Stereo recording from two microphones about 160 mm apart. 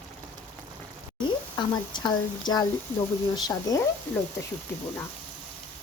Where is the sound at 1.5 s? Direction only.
30° left (ahead or behind).